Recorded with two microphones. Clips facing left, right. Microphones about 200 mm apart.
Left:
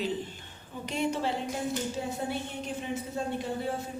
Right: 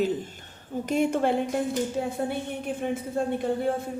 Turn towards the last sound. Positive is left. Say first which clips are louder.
# right 6 dB
turn(degrees=-55)  # may be behind; listen again after turning